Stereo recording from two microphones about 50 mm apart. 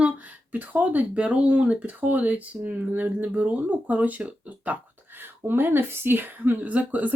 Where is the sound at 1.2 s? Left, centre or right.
Right.